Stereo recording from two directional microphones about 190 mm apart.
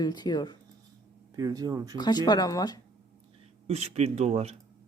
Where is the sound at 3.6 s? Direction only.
35° right (ahead or behind).